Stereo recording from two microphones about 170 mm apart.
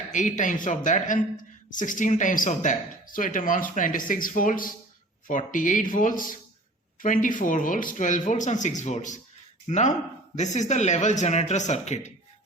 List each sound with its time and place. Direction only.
0.1 s speech: 45° left (ahead or behind)